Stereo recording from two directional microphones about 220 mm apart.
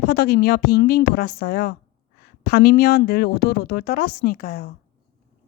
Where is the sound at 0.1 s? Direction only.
45° left (ahead or behind).